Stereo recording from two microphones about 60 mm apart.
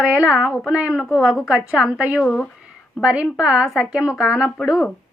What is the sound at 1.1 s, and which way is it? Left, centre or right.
A woman's voice, centre.